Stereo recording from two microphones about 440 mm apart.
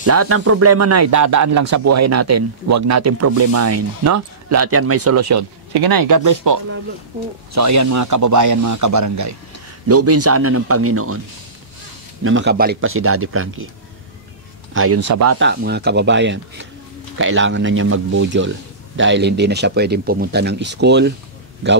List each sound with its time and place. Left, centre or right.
0.0 s speech: right
5.7 s speech: right
12.2 s speech: right
14.7 s speech: right